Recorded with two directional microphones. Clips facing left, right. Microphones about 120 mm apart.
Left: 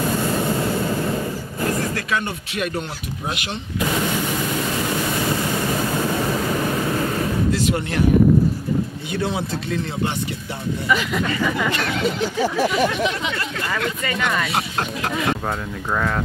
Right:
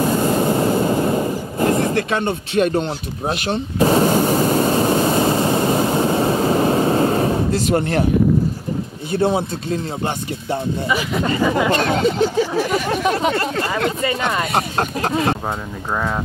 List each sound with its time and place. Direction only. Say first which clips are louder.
0.0 s vehicle: right 4 dB; 35° right (ahead or behind)
9.3 s speech: right 4 dB; 40° right (ahead or behind)
11.1 s speech: right 4 dB; 30° right (ahead or behind)
14.4 s speech: right 4 dB; 40° right (ahead or behind)